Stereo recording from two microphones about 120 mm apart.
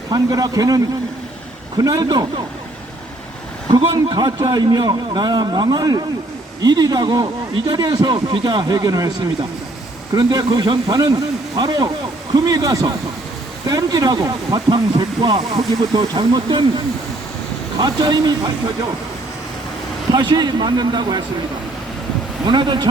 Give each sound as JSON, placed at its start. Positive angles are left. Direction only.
{"t": 0.1, "sound": "a man's voice", "side_deg": -35}
{"t": 1.8, "sound": "a man's voice", "side_deg": -30}
{"t": 3.9, "sound": "a man's voice", "side_deg": -35}
{"t": 17.7, "sound": "a man's voice", "side_deg": -35}
{"t": 20.1, "sound": "a man's voice", "side_deg": -35}
{"t": 22.4, "sound": "a man's voice", "side_deg": -40}